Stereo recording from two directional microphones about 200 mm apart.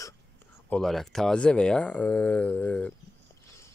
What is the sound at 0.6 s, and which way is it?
Speech, 5° left (ahead or behind).